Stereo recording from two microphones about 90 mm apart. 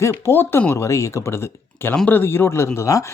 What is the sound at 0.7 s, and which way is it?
A woman's voice, 35° left (ahead or behind).